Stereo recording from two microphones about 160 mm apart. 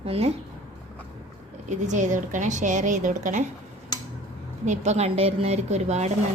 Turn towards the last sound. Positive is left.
turn(degrees=-45)  # may be behind; listen again after turning